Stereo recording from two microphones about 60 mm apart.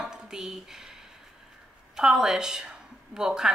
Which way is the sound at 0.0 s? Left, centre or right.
Centre.